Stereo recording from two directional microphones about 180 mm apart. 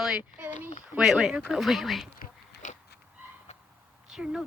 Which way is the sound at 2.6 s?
45° left (ahead or behind).